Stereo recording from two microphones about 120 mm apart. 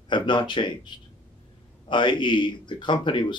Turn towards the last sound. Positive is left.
turn(degrees=40)  # may be behind; listen again after turning